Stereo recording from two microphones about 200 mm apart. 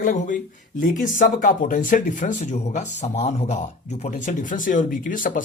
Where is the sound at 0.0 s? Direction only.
40° left (ahead or behind).